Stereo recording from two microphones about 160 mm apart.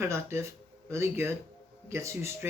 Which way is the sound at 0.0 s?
15° right (ahead or behind).